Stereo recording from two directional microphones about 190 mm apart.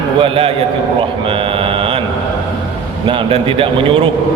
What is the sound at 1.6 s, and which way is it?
Mantra, 30° right (ahead or behind).